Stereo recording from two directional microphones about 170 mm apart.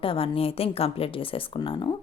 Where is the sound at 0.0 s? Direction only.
35° left (ahead or behind).